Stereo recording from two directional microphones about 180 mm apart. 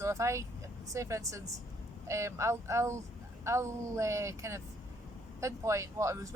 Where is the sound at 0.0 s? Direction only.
15° right (ahead or behind).